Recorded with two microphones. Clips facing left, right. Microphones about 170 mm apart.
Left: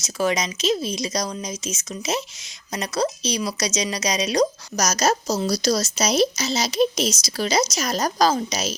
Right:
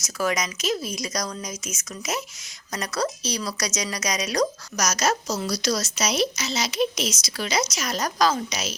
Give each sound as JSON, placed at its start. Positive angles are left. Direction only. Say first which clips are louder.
{"t": 0.0, "sound": "a woman's voice", "louder": "left 3 dB", "side_deg": 25}
{"t": 4.9, "sound": "speech", "louder": "left 3 dB", "side_deg": 35}